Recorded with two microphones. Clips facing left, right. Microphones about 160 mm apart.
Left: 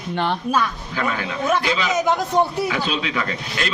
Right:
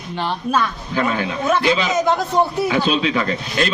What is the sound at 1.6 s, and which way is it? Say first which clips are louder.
A man's voice: right 3 dB; 25° right (ahead or behind).